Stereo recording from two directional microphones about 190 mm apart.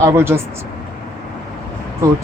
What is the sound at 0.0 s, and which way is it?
Speech, 15° right (ahead or behind).